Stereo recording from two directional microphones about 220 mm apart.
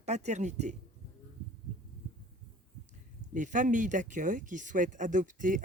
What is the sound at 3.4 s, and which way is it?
Speech, 35° right (ahead or behind).